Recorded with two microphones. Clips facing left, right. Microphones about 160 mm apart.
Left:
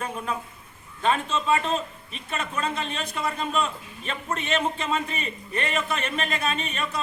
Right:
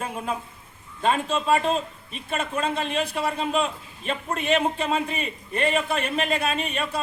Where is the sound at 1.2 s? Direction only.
35° right (ahead or behind).